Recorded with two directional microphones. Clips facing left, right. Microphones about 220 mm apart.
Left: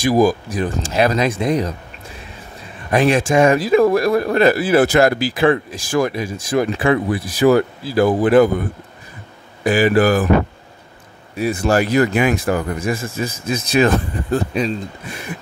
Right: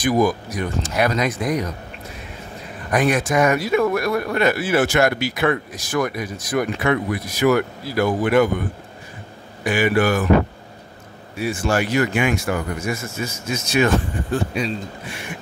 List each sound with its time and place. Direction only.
0.0 s speech: 30° left (ahead or behind)
2.9 s speech: 30° left (ahead or behind)
9.7 s speech: 35° left (ahead or behind)
11.3 s speech: 40° left (ahead or behind)